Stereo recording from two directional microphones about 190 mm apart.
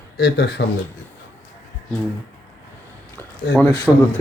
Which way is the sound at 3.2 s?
10° left (ahead or behind).